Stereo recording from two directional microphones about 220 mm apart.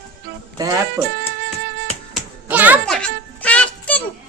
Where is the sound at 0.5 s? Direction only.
15° right (ahead or behind).